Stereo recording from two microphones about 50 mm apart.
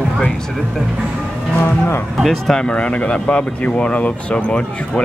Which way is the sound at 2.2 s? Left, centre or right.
Centre.